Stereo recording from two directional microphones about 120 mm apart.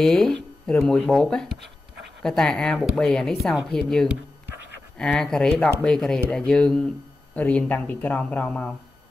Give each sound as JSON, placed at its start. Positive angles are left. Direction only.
{"t": 0.0, "sound": "speech", "side_deg": 5}